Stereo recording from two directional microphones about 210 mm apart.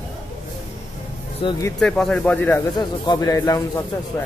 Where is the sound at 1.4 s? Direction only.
20° left (ahead or behind).